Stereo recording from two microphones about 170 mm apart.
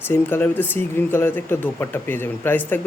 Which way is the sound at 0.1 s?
10° left (ahead or behind).